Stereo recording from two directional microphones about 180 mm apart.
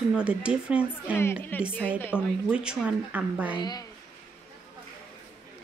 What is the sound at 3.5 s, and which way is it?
Speech, 20° left (ahead or behind).